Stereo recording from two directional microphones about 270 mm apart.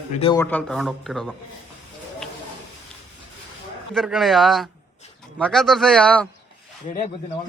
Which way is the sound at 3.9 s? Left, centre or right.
Centre.